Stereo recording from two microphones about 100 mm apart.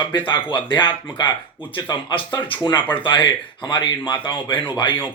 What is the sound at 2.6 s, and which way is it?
Speech, 40° left (ahead or behind).